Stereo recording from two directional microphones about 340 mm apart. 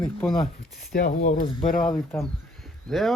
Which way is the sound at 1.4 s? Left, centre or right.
Centre.